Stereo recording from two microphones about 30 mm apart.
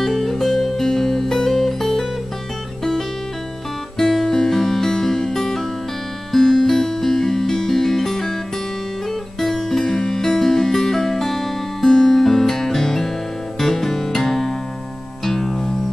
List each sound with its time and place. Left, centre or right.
0.0 s music: centre
4.1 s music: centre
9.4 s music: centre